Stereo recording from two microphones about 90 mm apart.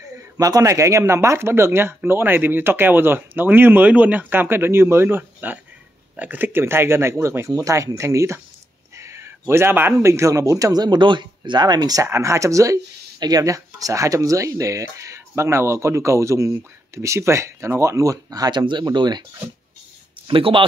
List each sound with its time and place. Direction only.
0.1 s a sound: 30° right (ahead or behind)
0.5 s speech: 35° right (ahead or behind)
12.1 s speech: 35° right (ahead or behind); by 19.2 s 55° right (ahead or behind)
20.2 s speech: 75° right (ahead or behind)